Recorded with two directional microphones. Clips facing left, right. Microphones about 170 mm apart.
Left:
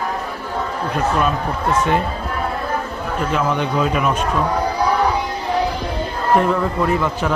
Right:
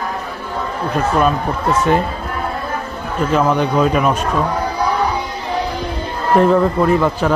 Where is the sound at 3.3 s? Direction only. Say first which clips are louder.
Right 5 dB; 40° right (ahead or behind).